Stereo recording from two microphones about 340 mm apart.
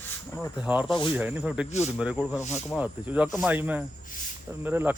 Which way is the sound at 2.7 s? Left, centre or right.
Centre.